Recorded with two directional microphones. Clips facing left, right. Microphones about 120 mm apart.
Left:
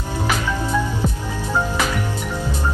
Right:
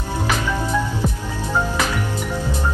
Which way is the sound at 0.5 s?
15° left (ahead or behind).